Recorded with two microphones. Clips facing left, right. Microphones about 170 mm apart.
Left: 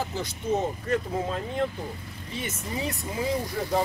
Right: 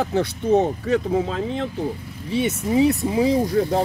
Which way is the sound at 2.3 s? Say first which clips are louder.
Right 13 dB; 75° right (ahead or behind).